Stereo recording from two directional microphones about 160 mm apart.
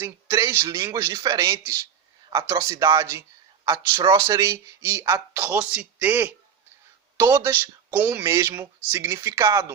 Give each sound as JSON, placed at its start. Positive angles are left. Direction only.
{"t": 0.0, "sound": "speech", "side_deg": -15}
{"t": 3.9, "sound": "speech", "side_deg": -30}